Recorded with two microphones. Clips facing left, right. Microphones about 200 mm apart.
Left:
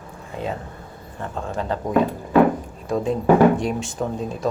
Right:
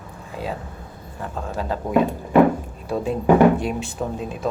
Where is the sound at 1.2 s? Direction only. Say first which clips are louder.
Left 1 dB; 5° right (ahead or behind).